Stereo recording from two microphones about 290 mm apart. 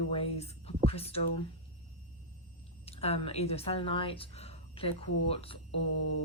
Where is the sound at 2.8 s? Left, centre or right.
Left.